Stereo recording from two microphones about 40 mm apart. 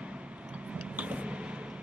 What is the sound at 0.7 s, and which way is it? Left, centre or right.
Vehicle, right.